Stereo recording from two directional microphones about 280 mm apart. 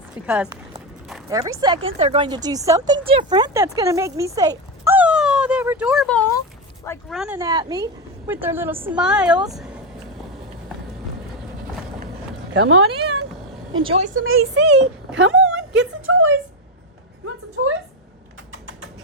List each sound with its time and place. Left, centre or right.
1.3 s speech: centre
7.2 s speech: centre
12.5 s speech: right
13.7 s a woman's voice: centre
14.2 s speech: right
15.4 s a sound: centre
17.6 s a sound: right